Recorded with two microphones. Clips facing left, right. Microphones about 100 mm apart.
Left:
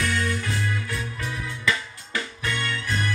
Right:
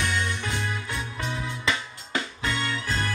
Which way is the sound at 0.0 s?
25° right (ahead or behind).